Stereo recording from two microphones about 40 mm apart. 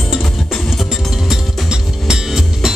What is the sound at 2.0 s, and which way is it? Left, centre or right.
Music, centre.